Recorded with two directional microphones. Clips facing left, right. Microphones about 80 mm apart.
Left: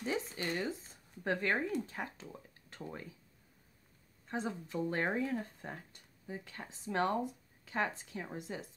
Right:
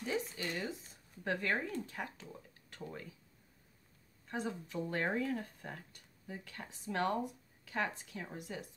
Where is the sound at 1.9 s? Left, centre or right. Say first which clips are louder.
Left 1 dB; left.